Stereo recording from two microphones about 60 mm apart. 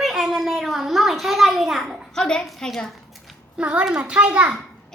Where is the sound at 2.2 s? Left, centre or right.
Centre.